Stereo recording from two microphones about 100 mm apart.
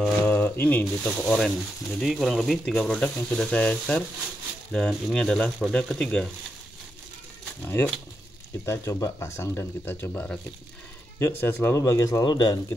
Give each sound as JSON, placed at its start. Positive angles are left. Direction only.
{"t": 0.2, "sound": "a sound", "side_deg": 20}
{"t": 1.0, "sound": "speech", "side_deg": 5}
{"t": 7.6, "sound": "speech", "side_deg": 25}
{"t": 11.7, "sound": "speech", "side_deg": 35}